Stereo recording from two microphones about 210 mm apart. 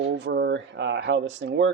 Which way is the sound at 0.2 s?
55° right (ahead or behind).